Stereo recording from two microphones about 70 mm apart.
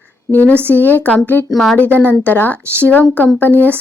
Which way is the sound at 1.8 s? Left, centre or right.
Left.